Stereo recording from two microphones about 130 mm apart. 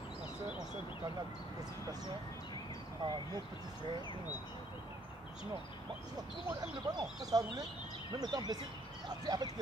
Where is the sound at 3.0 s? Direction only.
30° right (ahead or behind).